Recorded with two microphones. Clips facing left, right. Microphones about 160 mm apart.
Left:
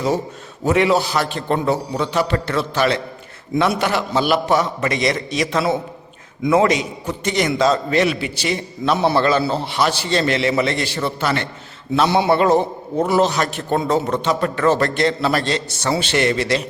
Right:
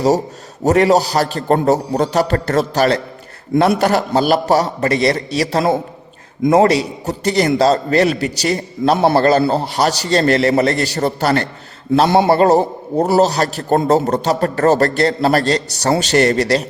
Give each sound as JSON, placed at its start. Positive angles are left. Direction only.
{"t": 0.6, "sound": "a man's voice", "side_deg": -40}